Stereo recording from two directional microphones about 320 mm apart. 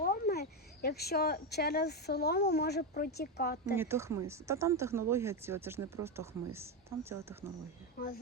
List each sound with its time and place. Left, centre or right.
0.0 s speech: left
3.8 s speech: centre